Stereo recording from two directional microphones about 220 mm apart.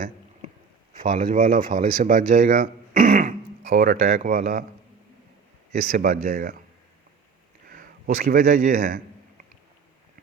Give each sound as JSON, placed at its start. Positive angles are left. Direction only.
{"t": 0.9, "sound": "speech", "side_deg": -40}
{"t": 5.7, "sound": "speech", "side_deg": -40}
{"t": 7.7, "sound": "a man's voice", "side_deg": -40}